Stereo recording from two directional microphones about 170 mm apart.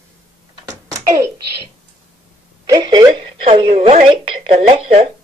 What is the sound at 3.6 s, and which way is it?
Speech, 40° right (ahead or behind).